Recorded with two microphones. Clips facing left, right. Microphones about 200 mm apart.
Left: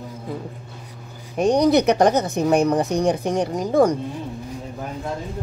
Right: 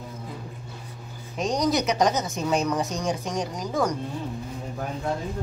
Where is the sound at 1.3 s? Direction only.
60° left (ahead or behind).